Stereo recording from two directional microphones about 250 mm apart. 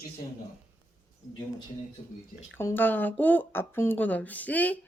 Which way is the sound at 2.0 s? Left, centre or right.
Left.